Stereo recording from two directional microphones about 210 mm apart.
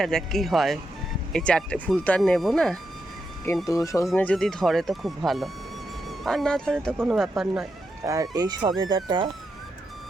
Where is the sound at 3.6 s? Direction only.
15° left (ahead or behind); by 7.6 s centre (ahead or behind).